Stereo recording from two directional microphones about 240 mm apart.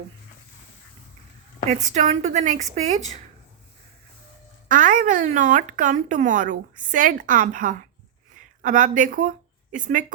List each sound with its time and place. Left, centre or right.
1.7 s a woman's voice: right
4.7 s speech: right